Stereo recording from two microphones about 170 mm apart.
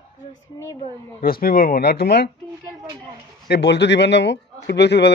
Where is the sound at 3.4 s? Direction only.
85° left.